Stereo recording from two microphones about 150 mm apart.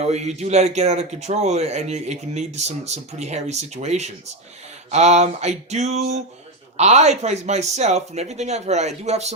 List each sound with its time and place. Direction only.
0.0 s speech: 50° right (ahead or behind)